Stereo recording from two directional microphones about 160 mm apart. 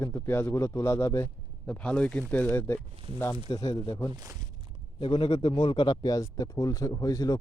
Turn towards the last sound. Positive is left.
turn(degrees=20)  # may be behind; listen again after turning